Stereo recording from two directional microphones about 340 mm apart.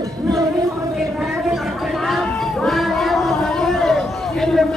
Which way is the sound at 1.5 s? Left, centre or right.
Centre.